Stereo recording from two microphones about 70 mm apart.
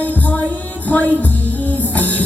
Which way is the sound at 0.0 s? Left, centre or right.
Left.